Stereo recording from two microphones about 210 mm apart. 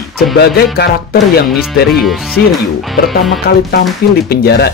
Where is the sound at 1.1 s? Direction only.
Centre (ahead or behind).